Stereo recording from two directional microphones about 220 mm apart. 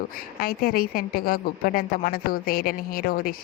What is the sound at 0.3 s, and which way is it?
Speech, 45° left (ahead or behind).